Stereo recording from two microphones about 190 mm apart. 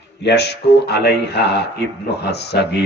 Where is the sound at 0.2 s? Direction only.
60° left (ahead or behind).